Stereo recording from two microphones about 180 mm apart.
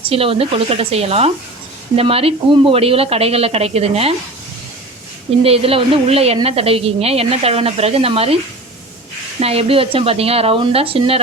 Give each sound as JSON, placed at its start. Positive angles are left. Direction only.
{"t": 0.0, "sound": "a woman's voice", "side_deg": -30}
{"t": 5.4, "sound": "a woman's voice", "side_deg": -30}
{"t": 9.4, "sound": "a woman's voice", "side_deg": -35}